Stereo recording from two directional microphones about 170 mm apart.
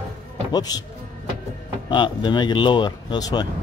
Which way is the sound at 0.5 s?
25° left (ahead or behind).